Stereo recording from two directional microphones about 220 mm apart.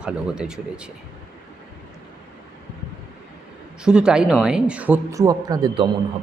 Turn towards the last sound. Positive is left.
turn(degrees=-20)  # may be behind; listen again after turning